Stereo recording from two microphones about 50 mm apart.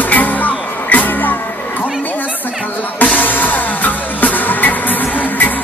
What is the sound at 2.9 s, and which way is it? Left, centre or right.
Music, left.